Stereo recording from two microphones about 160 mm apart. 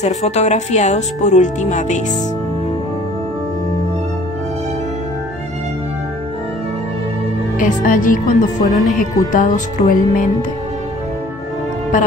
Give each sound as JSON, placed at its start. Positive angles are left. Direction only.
{"t": 0.0, "sound": "speech", "side_deg": 45}
{"t": 7.5, "sound": "speech", "side_deg": 60}
{"t": 8.6, "sound": "speech", "side_deg": 0}
{"t": 9.3, "sound": "speech", "side_deg": 50}